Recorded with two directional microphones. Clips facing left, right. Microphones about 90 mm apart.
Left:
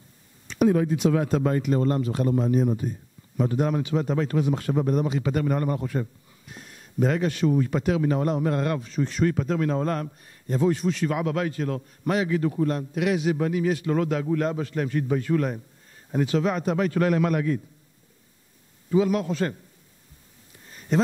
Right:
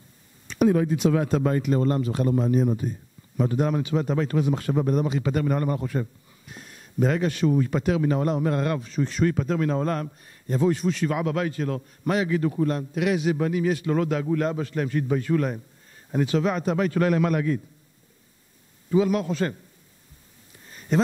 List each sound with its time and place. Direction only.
0.5 s a man's voice: 20° right (ahead or behind)
18.9 s a man's voice: 20° right (ahead or behind)